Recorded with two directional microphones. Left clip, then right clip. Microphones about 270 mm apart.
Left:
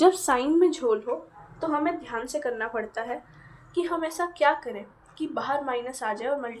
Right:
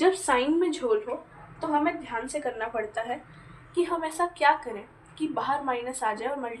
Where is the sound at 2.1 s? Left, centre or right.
Left.